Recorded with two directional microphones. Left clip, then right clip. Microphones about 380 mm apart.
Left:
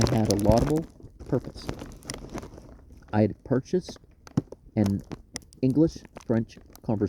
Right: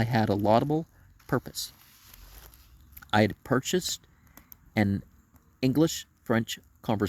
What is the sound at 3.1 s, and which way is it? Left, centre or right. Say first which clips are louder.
Speech: right 1 dB; centre.